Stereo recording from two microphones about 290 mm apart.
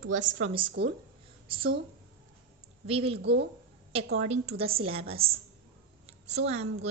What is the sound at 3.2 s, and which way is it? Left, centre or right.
Speech, right.